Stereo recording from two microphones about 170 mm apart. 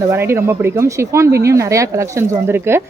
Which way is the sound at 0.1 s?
15° right (ahead or behind).